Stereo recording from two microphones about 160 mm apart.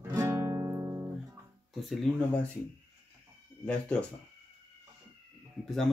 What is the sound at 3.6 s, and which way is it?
Speech, 5° left (ahead or behind).